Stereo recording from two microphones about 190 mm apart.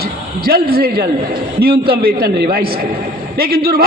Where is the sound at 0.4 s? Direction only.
55° right (ahead or behind).